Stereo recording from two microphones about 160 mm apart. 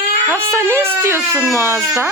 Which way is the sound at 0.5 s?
15° right (ahead or behind).